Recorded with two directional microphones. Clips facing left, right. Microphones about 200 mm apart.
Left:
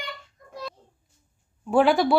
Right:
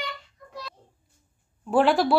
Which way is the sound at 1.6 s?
Centre (ahead or behind).